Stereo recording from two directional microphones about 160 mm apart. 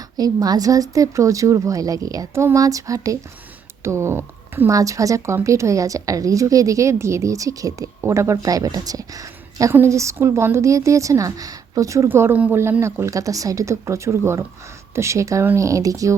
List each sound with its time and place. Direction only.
0.2 s a woman's voice: 25° right (ahead or behind)